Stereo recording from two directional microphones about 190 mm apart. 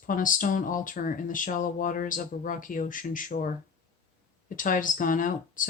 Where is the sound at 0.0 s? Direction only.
45° left (ahead or behind).